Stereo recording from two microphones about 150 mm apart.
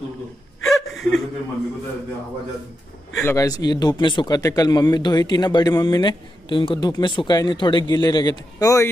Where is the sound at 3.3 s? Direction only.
25° left (ahead or behind).